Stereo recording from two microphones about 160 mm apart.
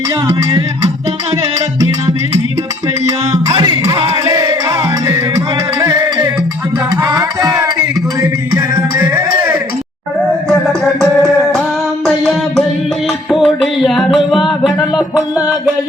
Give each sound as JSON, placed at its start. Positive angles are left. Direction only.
{"t": 0.3, "sound": "music", "side_deg": -25}
{"t": 5.8, "sound": "music", "side_deg": -20}
{"t": 11.0, "sound": "music", "side_deg": 0}
{"t": 12.0, "sound": "a sound", "side_deg": 0}
{"t": 13.3, "sound": "music", "side_deg": 0}